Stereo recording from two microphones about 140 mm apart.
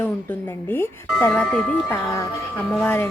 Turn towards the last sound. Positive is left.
turn(degrees=15)  # may be behind; listen again after turning